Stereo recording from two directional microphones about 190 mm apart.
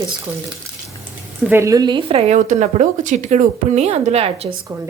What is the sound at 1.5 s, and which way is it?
A woman's voice, 15° right (ahead or behind).